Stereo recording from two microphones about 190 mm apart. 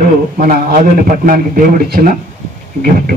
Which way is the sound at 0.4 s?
45° right (ahead or behind).